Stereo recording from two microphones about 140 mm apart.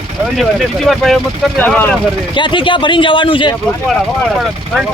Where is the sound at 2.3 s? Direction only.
35° left (ahead or behind).